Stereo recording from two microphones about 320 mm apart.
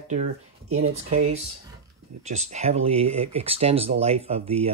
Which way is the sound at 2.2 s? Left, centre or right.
Right.